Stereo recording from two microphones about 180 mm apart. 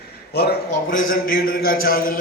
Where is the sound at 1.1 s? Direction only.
55° left (ahead or behind).